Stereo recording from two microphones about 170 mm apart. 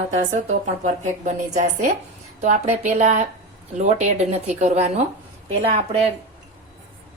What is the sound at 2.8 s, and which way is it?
Speech, 45° right (ahead or behind).